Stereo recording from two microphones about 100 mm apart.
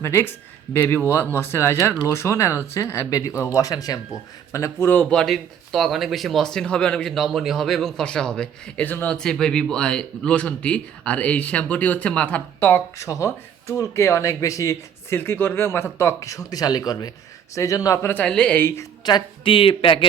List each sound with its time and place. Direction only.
0.0 s speech: 25° left (ahead or behind)
5.1 s speech: 5° left (ahead or behind)
9.1 s speech: 5° left (ahead or behind)
13.0 s speech: 30° left (ahead or behind)
18.2 s speech: 10° left (ahead or behind)
19.0 s speech: 50° left (ahead or behind)